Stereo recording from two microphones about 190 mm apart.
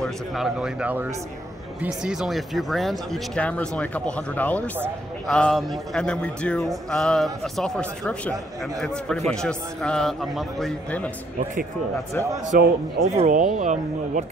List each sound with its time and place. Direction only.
0.0 s speech: centre (ahead or behind)
2.0 s speech: 5° right (ahead or behind)
12.4 s a man's voice: 45° right (ahead or behind)